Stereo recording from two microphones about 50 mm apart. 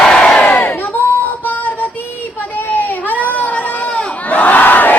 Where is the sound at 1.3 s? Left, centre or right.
Left.